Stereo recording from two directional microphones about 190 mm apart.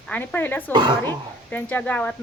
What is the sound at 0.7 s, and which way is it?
Speech, 25° right (ahead or behind).